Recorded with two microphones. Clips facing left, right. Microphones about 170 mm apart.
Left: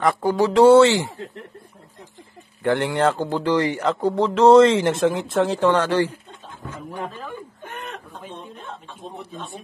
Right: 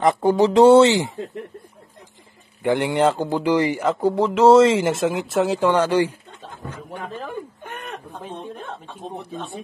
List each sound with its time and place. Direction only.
0.0 s speech: 20° right (ahead or behind)
2.6 s speech: 15° right (ahead or behind)
9.2 s speech: 60° right (ahead or behind)